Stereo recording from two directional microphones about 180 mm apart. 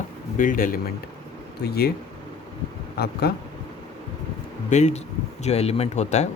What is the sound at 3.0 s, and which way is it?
Speech, 60° left (ahead or behind).